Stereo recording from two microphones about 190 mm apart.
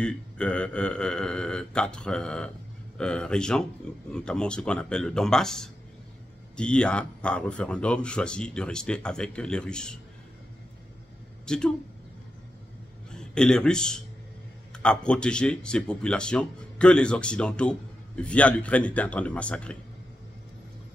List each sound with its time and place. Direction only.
0.0 s speech: 5° left (ahead or behind)
11.4 s speech: 5° left (ahead or behind)
13.1 s a man's voice: 5° left (ahead or behind)